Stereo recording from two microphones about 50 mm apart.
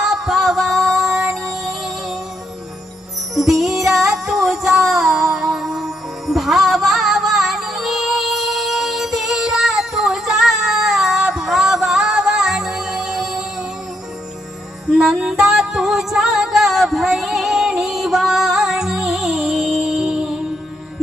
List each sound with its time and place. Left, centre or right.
0.0 s music: centre
3.3 s music: centre
14.8 s music: centre
19.9 s music: centre